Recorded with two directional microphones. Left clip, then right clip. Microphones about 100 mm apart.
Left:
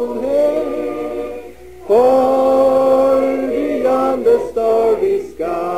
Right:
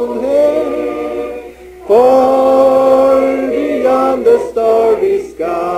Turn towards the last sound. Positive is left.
turn(degrees=-15)  # may be behind; listen again after turning